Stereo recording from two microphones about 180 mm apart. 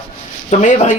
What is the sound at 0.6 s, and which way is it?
Speech, 40° left (ahead or behind).